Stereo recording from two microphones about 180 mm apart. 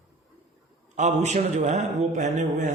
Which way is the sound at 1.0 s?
40° right (ahead or behind).